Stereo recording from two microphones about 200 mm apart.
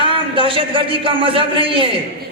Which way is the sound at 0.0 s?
25° right (ahead or behind).